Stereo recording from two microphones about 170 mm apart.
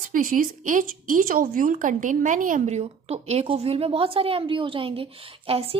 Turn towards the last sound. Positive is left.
turn(degrees=-35)  # may be behind; listen again after turning